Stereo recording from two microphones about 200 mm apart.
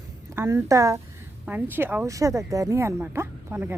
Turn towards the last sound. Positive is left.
turn(degrees=-10)  # may be behind; listen again after turning